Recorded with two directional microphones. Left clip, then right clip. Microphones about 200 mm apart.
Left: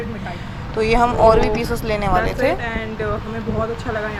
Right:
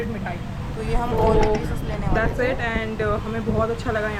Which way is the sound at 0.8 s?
30° left (ahead or behind).